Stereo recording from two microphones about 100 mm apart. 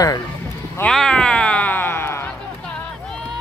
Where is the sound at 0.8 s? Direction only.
5° left (ahead or behind).